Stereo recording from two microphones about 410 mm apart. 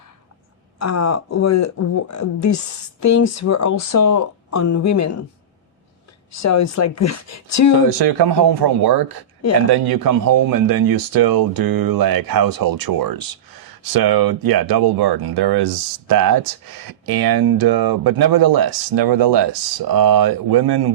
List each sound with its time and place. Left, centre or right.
0.8 s speech: left
6.3 s speech: left
7.9 s speech: right